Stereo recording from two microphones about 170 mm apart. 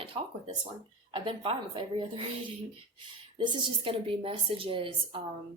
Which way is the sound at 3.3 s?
30° right (ahead or behind).